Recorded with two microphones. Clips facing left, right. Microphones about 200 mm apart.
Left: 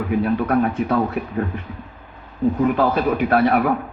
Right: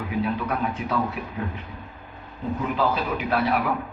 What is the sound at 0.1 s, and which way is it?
Speech, 50° left (ahead or behind).